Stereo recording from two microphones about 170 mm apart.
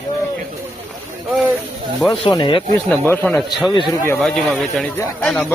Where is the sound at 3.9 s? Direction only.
15° left (ahead or behind).